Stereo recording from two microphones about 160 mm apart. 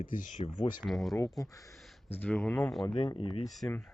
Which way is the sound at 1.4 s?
20° left (ahead or behind).